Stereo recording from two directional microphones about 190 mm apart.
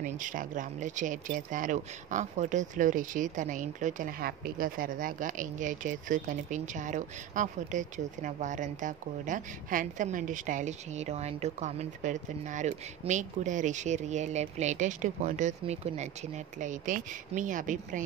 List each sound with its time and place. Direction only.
0.0 s speech: 45° right (ahead or behind)